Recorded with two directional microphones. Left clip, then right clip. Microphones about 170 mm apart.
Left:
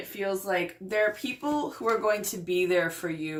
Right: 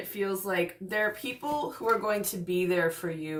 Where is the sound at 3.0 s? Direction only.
20° left (ahead or behind).